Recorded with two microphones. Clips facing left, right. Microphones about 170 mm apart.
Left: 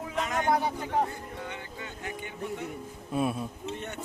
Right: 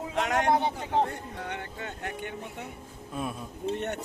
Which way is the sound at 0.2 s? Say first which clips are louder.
Right 3 dB; 75° right (ahead or behind).